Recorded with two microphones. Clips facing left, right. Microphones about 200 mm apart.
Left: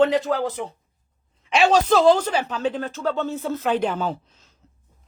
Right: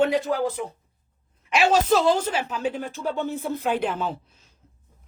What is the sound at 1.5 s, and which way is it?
Speech, centre (ahead or behind).